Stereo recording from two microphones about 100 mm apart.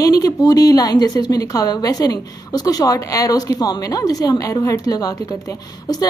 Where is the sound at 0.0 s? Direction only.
35° left (ahead or behind).